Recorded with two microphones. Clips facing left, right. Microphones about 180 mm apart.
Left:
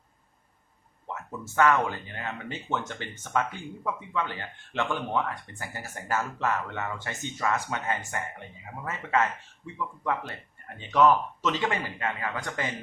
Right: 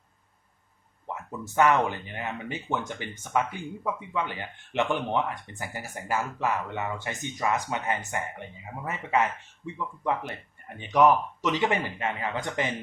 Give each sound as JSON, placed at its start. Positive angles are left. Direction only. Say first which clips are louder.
{"t": 1.0, "sound": "a man's voice", "louder": "right 1 dB", "side_deg": -15}